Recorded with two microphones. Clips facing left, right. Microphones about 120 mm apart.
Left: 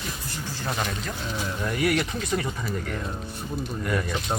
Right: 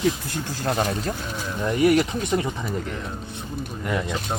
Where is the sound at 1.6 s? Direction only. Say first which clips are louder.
Right 7 dB; 20° right (ahead or behind).